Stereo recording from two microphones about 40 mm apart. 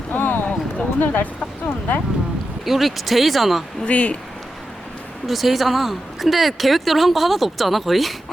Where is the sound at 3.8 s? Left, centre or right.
Left.